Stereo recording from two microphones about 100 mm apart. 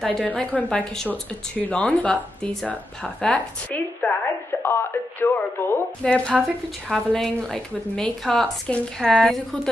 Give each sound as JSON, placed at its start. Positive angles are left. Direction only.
{"t": 0.0, "sound": "a woman's voice", "side_deg": 5}
{"t": 4.6, "sound": "music", "side_deg": 20}
{"t": 6.0, "sound": "a woman's voice", "side_deg": 10}